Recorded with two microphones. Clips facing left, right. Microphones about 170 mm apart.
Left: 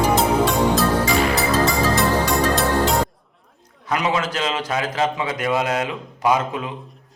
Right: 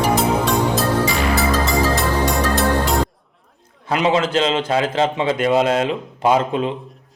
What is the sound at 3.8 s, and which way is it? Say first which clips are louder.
A man's voice: right 4 dB; 25° right (ahead or behind).